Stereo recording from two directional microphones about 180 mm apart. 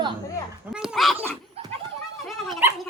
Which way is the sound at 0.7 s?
5° right (ahead or behind).